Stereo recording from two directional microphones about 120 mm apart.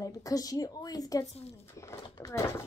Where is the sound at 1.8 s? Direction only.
25° left (ahead or behind).